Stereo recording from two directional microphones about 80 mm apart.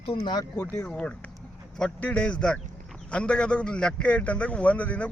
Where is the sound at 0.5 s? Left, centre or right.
Left.